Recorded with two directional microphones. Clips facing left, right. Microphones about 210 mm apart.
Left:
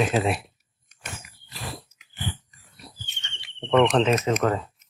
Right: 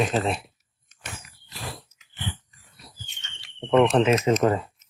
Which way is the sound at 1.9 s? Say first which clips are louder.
Left 2 dB; 10° left (ahead or behind).